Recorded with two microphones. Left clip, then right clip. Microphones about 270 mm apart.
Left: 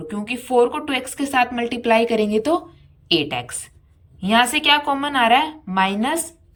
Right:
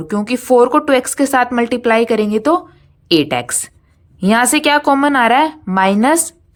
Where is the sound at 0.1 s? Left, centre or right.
Centre.